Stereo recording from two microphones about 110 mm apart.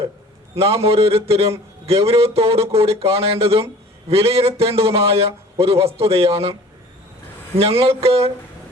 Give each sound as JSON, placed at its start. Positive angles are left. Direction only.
{"t": 0.5, "sound": "a man's voice", "side_deg": -65}
{"t": 7.6, "sound": "a man's voice", "side_deg": -60}